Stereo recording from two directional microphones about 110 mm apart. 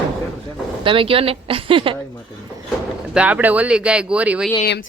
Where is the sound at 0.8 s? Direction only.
55° right (ahead or behind).